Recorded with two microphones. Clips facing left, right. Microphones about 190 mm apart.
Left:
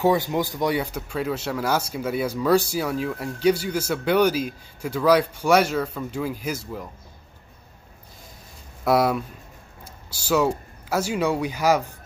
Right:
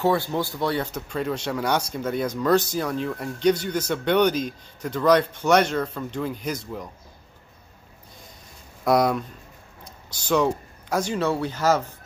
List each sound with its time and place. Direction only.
0.0 s speech: 15° left (ahead or behind)
8.8 s speech: 5° left (ahead or behind)
10.2 s speech: 5° left (ahead or behind)